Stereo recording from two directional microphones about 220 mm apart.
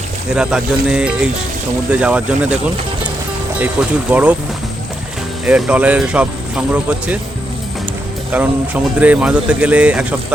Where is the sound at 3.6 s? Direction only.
5° right (ahead or behind).